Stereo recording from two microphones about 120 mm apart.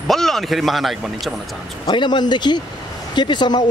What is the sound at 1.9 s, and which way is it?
Speech, 40° left (ahead or behind).